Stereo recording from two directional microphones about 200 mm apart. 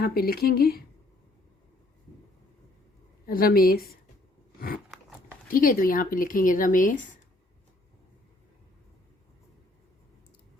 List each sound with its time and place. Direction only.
0.0 s speech: 50° left (ahead or behind)
3.2 s speech: 45° left (ahead or behind)
5.5 s speech: 45° left (ahead or behind)